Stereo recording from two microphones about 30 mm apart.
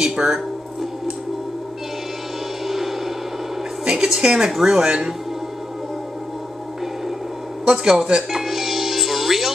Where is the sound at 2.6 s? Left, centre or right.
Centre.